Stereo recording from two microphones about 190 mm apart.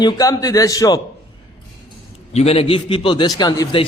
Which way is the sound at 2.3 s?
35° left (ahead or behind).